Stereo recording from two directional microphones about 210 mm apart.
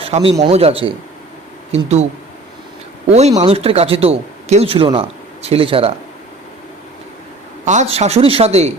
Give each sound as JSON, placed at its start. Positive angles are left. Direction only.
{"t": 0.0, "sound": "a man's voice", "side_deg": -25}
{"t": 3.1, "sound": "a man's voice", "side_deg": -30}
{"t": 7.6, "sound": "a man's voice", "side_deg": -35}